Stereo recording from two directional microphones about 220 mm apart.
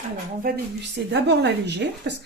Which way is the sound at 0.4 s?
50° right (ahead or behind).